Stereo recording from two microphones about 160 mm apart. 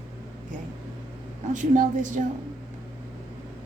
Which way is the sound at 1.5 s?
55° right (ahead or behind).